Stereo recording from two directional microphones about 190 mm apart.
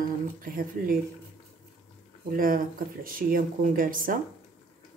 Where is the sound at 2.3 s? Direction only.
50° right (ahead or behind).